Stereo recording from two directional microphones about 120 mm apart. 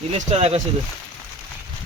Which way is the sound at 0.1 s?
60° right (ahead or behind).